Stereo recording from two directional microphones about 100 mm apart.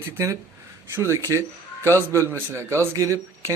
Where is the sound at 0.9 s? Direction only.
25° right (ahead or behind).